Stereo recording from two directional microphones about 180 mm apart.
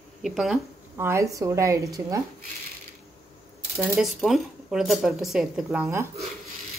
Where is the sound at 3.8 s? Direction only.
Centre (ahead or behind).